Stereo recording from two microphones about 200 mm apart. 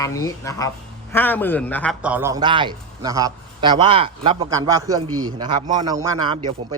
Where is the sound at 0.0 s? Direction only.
15° left (ahead or behind).